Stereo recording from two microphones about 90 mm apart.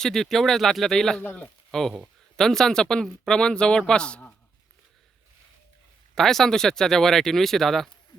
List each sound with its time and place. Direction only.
0.0 s speech: 5° left (ahead or behind)
1.2 s speech: 20° left (ahead or behind)
1.7 s speech: 5° left (ahead or behind)
6.1 s speech: 5° left (ahead or behind)